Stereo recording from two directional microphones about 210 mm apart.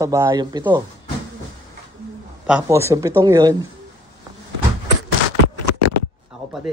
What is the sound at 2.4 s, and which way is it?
Speech, 10° right (ahead or behind).